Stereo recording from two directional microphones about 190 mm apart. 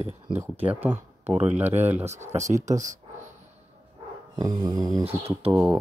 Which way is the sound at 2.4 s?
40° right (ahead or behind).